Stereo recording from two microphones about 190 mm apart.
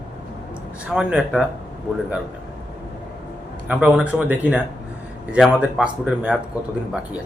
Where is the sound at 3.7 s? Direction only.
5° right (ahead or behind).